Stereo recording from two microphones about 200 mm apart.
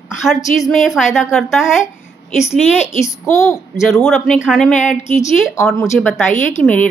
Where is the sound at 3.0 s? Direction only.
15° left (ahead or behind).